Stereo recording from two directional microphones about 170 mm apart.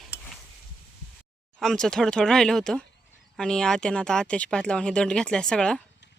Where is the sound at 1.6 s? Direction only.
Centre (ahead or behind).